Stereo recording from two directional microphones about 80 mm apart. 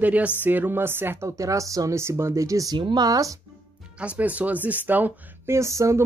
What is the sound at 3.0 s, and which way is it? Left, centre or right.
Speech, right.